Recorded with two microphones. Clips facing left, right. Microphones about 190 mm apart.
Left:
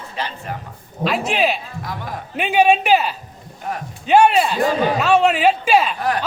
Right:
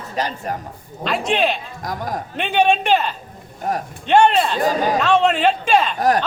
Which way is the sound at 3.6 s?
45° right (ahead or behind).